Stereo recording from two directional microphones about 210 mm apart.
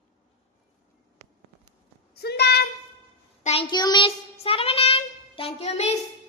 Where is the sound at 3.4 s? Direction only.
25° left (ahead or behind).